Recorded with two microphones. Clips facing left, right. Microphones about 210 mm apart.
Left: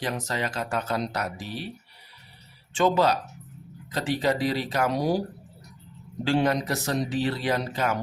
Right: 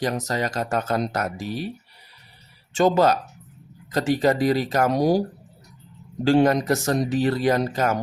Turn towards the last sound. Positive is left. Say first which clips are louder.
# right 5 dB
turn(degrees=-45)  # may be behind; listen again after turning